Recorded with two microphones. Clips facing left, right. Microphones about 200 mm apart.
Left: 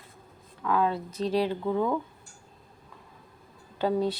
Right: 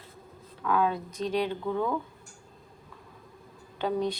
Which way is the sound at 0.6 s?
Centre (ahead or behind).